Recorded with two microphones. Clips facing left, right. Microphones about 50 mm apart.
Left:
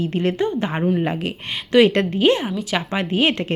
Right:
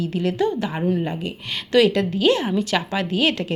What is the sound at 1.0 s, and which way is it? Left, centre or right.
Speech, left.